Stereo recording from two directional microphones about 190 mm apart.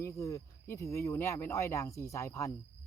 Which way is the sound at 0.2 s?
15° left (ahead or behind).